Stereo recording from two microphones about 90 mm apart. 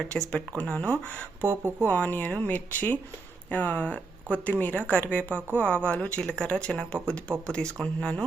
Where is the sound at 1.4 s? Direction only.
25° right (ahead or behind).